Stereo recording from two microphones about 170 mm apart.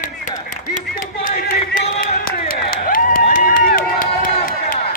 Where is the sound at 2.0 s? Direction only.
55° left (ahead or behind).